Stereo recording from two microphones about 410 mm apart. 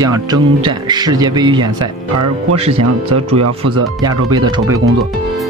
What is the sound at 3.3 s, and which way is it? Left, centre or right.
Speech, right.